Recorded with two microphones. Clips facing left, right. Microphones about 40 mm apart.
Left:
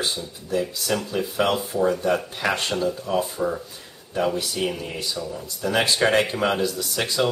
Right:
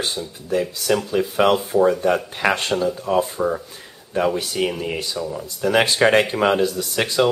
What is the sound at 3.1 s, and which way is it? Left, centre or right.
Speech, right.